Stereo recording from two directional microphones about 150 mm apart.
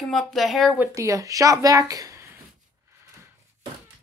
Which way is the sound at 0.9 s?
20° right (ahead or behind).